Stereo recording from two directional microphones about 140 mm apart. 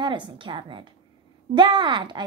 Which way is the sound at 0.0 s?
35° right (ahead or behind).